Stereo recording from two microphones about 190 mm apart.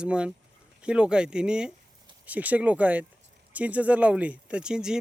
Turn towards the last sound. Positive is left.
turn(degrees=-5)  # may be behind; listen again after turning